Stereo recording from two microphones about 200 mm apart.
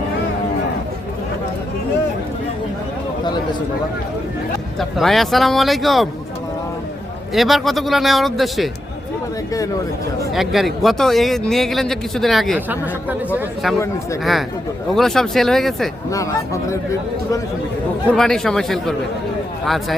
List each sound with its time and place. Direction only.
4.8 s a man's voice: centre (ahead or behind)
7.3 s a man's voice: centre (ahead or behind)
10.3 s a man's voice: centre (ahead or behind)
13.7 s speech: 15° left (ahead or behind)
14.9 s a man's voice: centre (ahead or behind)
16.0 s speech: 15° left (ahead or behind)
18.1 s a man's voice: 5° left (ahead or behind)